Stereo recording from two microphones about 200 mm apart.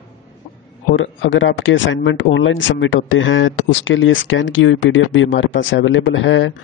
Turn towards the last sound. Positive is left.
turn(degrees=70)  # may be behind; listen again after turning